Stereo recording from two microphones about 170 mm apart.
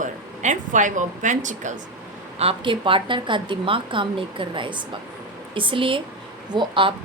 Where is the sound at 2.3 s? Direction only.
30° right (ahead or behind).